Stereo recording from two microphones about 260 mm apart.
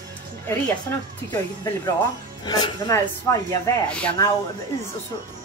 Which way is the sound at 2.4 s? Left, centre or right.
Centre.